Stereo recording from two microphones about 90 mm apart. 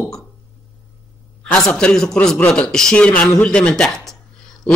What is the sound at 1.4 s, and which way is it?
A man's voice, 10° left (ahead or behind).